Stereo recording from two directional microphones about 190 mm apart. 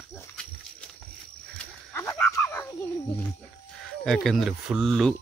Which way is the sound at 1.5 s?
10° left (ahead or behind).